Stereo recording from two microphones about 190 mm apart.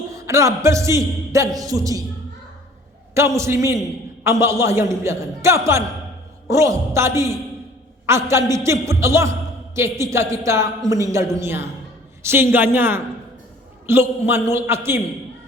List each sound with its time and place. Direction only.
0.1 s a man's voice: 15° right (ahead or behind)
3.2 s a man's voice: 15° right (ahead or behind)